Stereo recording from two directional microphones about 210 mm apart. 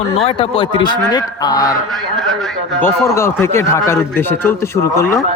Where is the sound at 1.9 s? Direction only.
Centre (ahead or behind).